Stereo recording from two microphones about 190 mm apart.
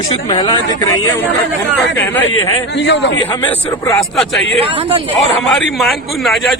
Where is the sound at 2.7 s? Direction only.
70° left (ahead or behind).